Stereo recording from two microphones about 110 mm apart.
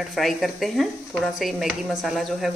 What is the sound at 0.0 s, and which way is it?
A woman's voice, centre (ahead or behind).